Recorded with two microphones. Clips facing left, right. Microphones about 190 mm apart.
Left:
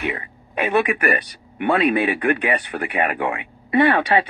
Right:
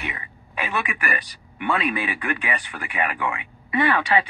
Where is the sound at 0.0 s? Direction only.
45° left (ahead or behind).